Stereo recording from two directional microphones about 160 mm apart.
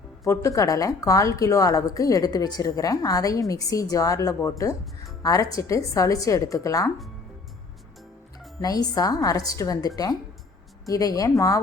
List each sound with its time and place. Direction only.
0.3 s a woman's voice: 20° left (ahead or behind)
8.6 s a woman's voice: 25° left (ahead or behind)